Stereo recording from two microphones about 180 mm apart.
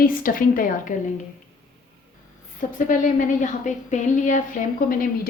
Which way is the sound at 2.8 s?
45° left (ahead or behind).